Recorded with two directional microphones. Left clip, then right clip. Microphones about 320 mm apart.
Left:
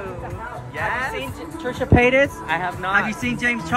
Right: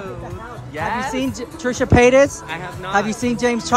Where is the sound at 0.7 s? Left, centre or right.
Right.